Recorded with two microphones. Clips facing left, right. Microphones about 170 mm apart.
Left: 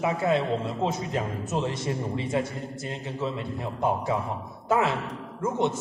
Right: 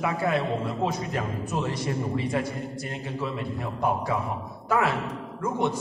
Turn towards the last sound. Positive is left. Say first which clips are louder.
# even
turn(degrees=25)  # may be behind; listen again after turning